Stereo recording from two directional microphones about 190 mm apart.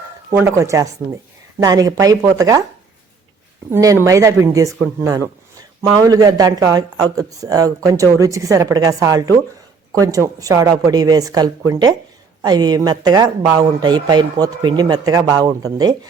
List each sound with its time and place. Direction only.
0.3 s speech: 15° right (ahead or behind)
3.7 s speech: 15° right (ahead or behind)